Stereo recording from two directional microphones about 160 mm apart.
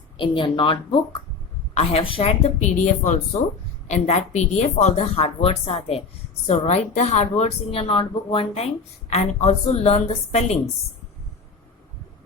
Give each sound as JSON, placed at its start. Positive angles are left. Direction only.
{"t": 0.2, "sound": "a woman's voice", "side_deg": 30}
{"t": 2.6, "sound": "a woman's voice", "side_deg": 50}